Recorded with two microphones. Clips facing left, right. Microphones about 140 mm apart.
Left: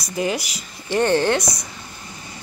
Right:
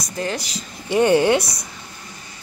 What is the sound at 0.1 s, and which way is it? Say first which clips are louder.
Speech: left 3 dB; 10° left (ahead or behind).